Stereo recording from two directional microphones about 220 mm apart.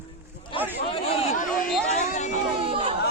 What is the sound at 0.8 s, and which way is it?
Speech, 25° left (ahead or behind).